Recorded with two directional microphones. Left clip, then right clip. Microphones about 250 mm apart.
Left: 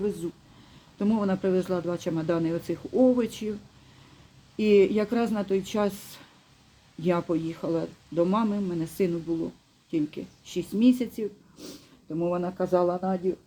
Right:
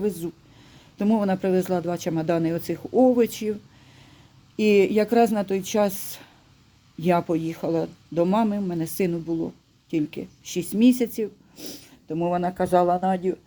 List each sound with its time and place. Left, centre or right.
0.2 s speech: right
4.5 s speech: right